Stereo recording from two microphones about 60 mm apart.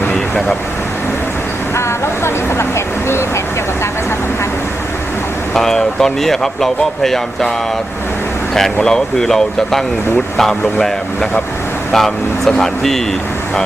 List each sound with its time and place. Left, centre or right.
2.2 s a sound: left
5.5 s speech: centre
8.5 s speech: centre